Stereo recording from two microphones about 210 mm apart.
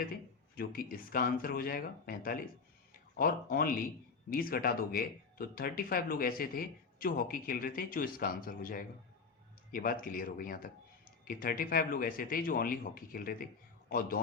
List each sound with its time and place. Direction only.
0.5 s speech: 45° left (ahead or behind)